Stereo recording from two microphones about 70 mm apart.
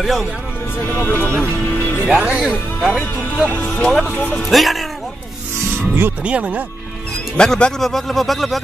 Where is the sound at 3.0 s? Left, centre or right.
Left.